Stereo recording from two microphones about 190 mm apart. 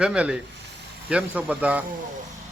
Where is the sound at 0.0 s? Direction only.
5° right (ahead or behind).